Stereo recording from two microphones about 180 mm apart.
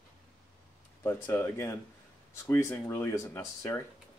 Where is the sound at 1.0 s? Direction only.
15° left (ahead or behind).